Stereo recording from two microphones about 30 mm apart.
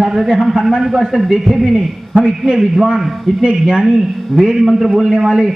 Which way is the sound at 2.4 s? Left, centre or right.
Centre.